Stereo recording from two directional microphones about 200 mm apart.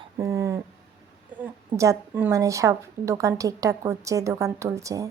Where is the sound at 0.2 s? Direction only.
15° right (ahead or behind).